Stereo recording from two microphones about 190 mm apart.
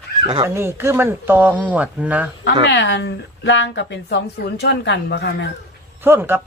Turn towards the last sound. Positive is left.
turn(degrees=-10)  # may be behind; listen again after turning